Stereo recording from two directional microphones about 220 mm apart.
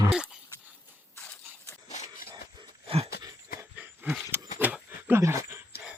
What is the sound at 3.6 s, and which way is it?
Dog, 10° right (ahead or behind).